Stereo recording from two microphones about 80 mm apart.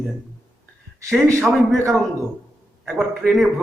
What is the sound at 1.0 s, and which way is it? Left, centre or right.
Speech, right.